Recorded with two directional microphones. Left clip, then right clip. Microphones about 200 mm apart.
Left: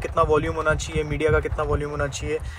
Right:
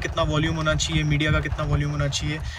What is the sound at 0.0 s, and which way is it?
Speech, 20° left (ahead or behind).